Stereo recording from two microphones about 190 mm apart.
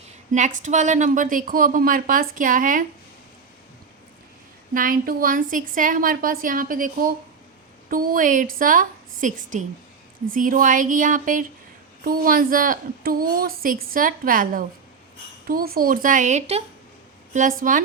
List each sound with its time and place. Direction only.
0.3 s a woman's voice: 40° right (ahead or behind)
4.7 s a woman's voice: 45° right (ahead or behind)